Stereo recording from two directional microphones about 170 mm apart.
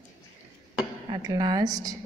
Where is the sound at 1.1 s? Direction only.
25° right (ahead or behind).